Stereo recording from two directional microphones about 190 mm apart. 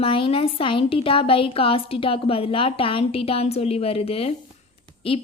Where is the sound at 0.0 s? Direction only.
30° left (ahead or behind).